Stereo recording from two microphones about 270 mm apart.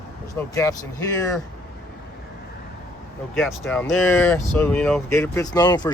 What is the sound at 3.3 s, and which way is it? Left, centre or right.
Speech, centre.